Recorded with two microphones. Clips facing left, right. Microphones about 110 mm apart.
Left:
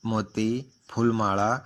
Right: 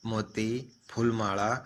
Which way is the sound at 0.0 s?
35° left (ahead or behind).